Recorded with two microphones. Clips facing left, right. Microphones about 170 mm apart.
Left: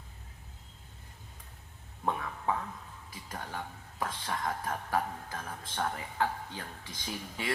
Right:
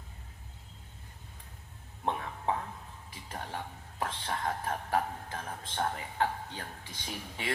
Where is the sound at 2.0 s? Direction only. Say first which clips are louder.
Even; 25° right (ahead or behind).